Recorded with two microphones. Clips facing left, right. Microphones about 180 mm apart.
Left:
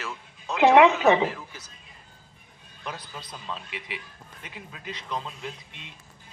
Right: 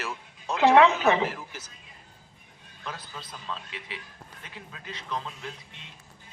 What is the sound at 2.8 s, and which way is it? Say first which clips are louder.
A man's voice: left 2 dB; 15° left (ahead or behind).